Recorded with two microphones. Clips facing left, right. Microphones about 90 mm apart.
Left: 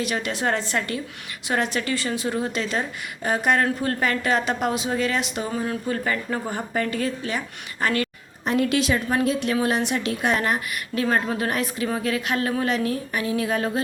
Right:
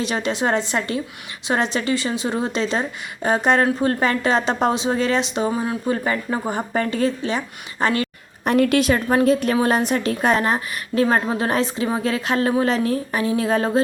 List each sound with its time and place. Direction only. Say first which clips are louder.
0.0 s a woman's voice: right 3 dB; 25° right (ahead or behind)
8.4 s a woman's voice: right 5 dB; 60° right (ahead or behind); by 13.8 s 35° right (ahead or behind)